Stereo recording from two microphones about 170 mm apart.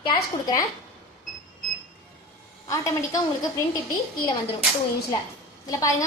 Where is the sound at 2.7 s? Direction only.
20° left (ahead or behind).